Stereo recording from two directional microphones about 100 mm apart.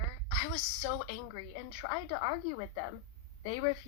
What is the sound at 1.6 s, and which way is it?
Speech, 65° right (ahead or behind).